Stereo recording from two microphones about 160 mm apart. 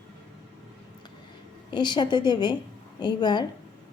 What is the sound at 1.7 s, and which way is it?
Speech, 30° left (ahead or behind).